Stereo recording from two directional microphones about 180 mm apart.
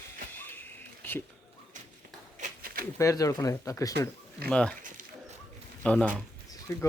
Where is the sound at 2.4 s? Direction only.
55° right (ahead or behind).